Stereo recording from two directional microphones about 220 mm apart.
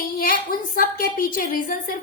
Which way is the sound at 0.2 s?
40° left (ahead or behind).